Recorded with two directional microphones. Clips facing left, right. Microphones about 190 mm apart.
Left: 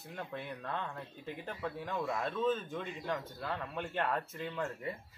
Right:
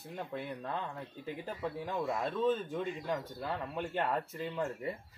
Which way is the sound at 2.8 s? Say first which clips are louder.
Right 3 dB; 10° right (ahead or behind).